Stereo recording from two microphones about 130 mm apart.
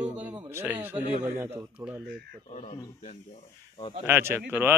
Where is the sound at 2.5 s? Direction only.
70° left (ahead or behind).